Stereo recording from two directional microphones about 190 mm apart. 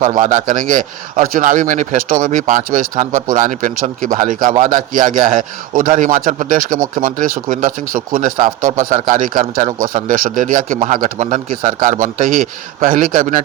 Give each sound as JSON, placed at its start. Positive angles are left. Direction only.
{"t": 0.0, "sound": "speech", "side_deg": -40}